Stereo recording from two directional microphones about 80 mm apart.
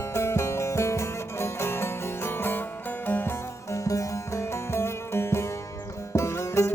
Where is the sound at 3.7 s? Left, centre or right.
Left.